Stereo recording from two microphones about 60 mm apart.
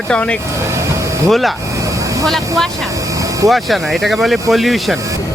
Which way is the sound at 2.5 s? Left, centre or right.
Centre.